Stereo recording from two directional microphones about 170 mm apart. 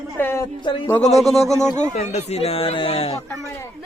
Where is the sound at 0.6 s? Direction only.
30° left (ahead or behind).